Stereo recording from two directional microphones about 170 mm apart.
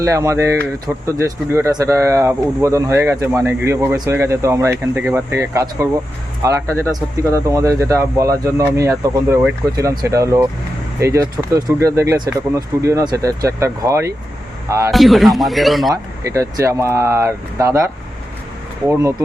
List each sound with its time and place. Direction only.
0.0 s speech: 20° right (ahead or behind)
14.9 s speech: centre (ahead or behind)
15.9 s speech: 20° right (ahead or behind)